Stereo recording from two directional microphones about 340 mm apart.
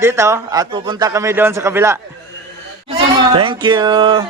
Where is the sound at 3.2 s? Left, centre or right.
Centre.